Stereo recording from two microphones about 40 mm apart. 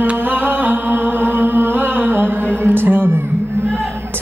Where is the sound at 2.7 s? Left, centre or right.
Right.